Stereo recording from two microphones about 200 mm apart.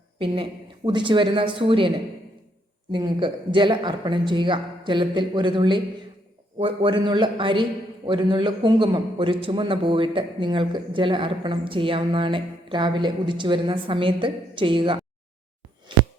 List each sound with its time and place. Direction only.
0.9 s a man's voice: 25° right (ahead or behind)
2.9 s a man's voice: 20° right (ahead or behind)